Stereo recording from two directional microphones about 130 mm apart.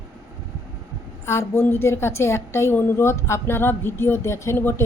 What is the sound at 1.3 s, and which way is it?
A woman's voice, 20° left (ahead or behind).